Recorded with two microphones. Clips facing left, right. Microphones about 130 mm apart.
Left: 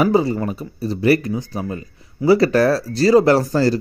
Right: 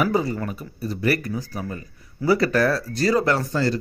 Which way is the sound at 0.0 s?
30° left (ahead or behind).